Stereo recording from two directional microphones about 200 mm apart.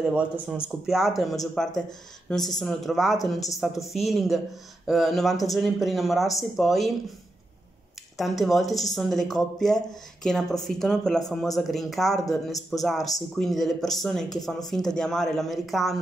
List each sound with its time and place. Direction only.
0.1 s speech: 5° right (ahead or behind)
8.2 s speech: centre (ahead or behind)